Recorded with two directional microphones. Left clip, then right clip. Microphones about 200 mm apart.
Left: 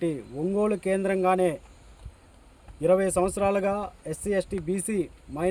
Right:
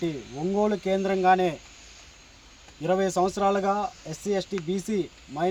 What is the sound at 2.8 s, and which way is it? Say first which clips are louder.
Speech: left 2 dB; 25° left (ahead or behind).